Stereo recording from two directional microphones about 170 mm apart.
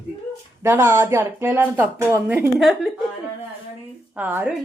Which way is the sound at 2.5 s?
Centre (ahead or behind).